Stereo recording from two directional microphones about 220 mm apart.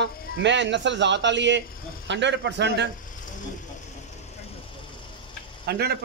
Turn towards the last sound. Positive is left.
turn(degrees=-45)  # may be behind; listen again after turning